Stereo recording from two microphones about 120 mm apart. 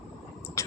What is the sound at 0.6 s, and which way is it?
Vehicle, 25° left (ahead or behind).